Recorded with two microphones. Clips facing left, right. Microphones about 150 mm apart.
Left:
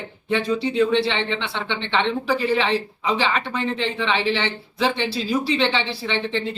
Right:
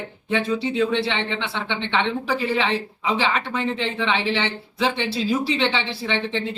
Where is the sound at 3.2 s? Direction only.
15° right (ahead or behind).